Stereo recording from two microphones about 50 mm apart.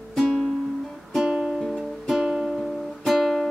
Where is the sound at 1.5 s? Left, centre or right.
Centre.